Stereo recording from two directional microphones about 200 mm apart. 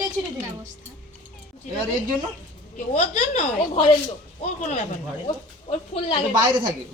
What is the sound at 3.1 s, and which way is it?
Speech, 40° left (ahead or behind).